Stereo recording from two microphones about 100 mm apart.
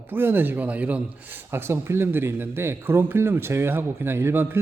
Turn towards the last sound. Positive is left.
turn(degrees=-20)  # may be behind; listen again after turning